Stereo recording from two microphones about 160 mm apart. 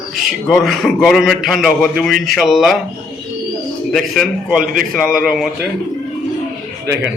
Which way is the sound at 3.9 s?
Centre (ahead or behind).